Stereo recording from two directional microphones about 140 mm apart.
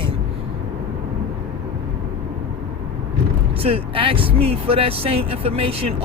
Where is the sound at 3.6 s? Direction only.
40° right (ahead or behind).